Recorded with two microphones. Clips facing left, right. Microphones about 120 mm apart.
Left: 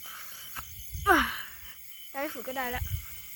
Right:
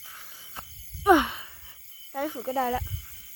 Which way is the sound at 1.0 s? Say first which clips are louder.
Right 5 dB; 20° right (ahead or behind).